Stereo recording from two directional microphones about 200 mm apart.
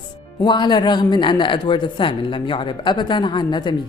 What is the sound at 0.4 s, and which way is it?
Speech, 20° left (ahead or behind).